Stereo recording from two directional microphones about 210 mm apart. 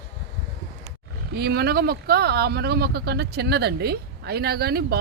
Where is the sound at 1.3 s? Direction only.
50° right (ahead or behind).